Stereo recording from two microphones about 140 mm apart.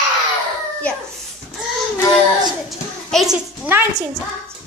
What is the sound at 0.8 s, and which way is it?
Speech, 10° left (ahead or behind).